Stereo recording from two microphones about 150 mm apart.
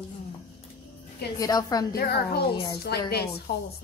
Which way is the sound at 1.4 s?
25° left (ahead or behind).